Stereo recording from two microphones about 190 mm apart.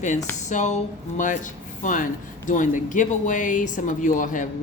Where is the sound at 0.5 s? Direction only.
40° left (ahead or behind).